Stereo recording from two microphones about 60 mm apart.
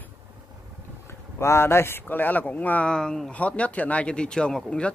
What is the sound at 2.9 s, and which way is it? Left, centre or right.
Speech, centre.